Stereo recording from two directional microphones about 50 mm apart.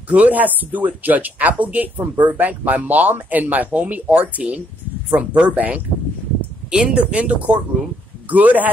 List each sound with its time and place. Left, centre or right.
0.1 s speech: right